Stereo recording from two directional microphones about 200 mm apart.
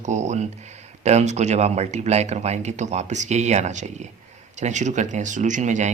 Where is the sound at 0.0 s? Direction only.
35° right (ahead or behind).